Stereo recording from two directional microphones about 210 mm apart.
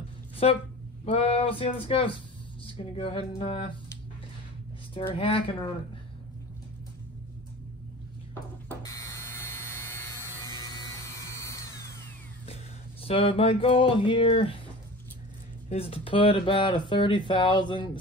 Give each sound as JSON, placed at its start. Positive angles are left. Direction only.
{"t": 0.4, "sound": "speech", "side_deg": 30}
{"t": 4.9, "sound": "speech", "side_deg": 25}
{"t": 8.6, "sound": "a sound", "side_deg": 15}
{"t": 13.0, "sound": "speech", "side_deg": 25}
{"t": 15.7, "sound": "speech", "side_deg": 25}